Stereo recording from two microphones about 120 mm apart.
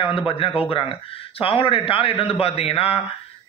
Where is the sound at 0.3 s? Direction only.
50° left (ahead or behind).